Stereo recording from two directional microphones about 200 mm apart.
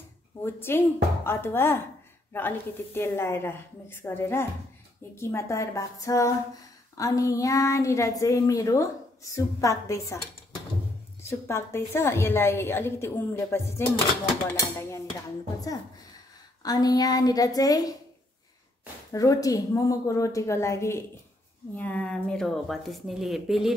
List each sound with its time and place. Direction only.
0.4 s speech: 10° left (ahead or behind)
11.2 s speech: 15° left (ahead or behind)
16.6 s a woman's voice: 20° left (ahead or behind)
19.1 s speech: 15° left (ahead or behind); by 23.7 s centre (ahead or behind)